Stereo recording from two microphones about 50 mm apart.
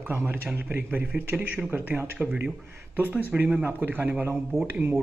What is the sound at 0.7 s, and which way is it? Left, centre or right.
Speech, right.